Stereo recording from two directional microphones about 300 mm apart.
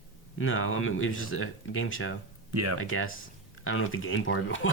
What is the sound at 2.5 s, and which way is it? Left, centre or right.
Speech, right.